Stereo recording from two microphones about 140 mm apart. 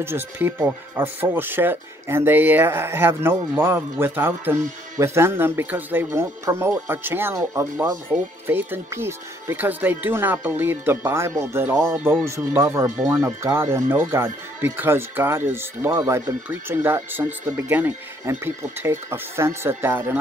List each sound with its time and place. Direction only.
0.0 s speech: 15° right (ahead or behind)